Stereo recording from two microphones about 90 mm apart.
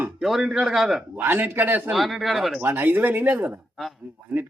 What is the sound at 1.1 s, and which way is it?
Speech, 25° right (ahead or behind).